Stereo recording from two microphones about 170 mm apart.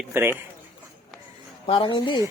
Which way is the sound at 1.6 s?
30° left (ahead or behind).